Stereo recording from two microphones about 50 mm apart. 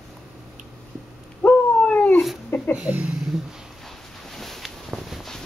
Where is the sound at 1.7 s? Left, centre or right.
Left.